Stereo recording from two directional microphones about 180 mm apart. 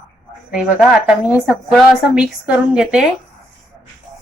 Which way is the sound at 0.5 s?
5° right (ahead or behind).